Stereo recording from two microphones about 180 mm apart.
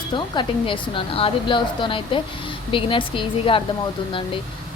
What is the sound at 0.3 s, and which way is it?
A woman's voice, 30° left (ahead or behind).